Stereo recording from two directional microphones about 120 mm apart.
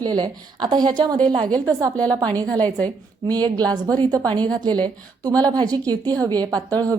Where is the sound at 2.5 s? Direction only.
10° left (ahead or behind).